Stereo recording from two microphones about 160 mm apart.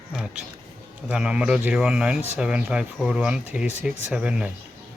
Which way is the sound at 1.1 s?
5° right (ahead or behind).